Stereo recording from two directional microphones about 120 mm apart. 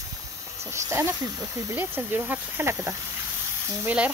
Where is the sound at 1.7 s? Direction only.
15° right (ahead or behind).